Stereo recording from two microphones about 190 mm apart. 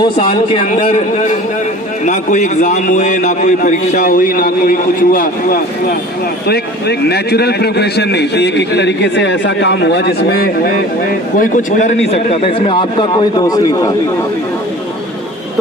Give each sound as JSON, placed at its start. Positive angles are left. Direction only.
{"t": 0.5, "sound": "a man's voice", "side_deg": 30}